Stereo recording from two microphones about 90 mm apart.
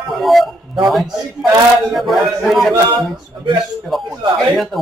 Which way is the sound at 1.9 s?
Centre (ahead or behind).